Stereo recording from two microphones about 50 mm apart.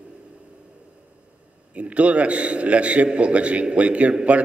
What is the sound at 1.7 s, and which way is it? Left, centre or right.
A man's voice, right.